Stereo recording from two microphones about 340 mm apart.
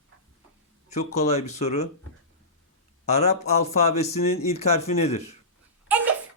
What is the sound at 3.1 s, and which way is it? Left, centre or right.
Speech, centre.